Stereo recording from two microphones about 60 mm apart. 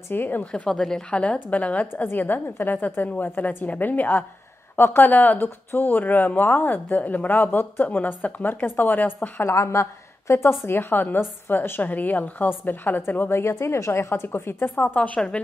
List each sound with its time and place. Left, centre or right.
0.1 s speech: left
0.4 s a woman's voice: left
0.7 s a woman's voice: centre
2.0 s speech: left
9.5 s a woman's voice: left
13.7 s a woman's voice: left
15.1 s speech: centre